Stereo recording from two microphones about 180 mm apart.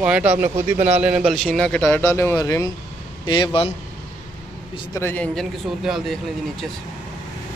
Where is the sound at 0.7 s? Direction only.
40° right (ahead or behind).